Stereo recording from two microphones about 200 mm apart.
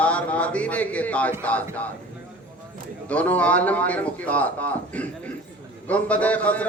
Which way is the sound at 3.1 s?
5° left (ahead or behind).